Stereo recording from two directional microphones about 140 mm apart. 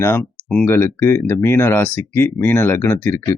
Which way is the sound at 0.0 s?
20° left (ahead or behind).